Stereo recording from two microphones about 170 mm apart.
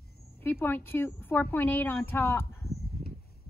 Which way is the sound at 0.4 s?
15° left (ahead or behind).